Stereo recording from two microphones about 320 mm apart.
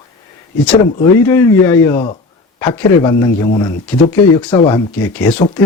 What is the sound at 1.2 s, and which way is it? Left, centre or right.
Speech, centre.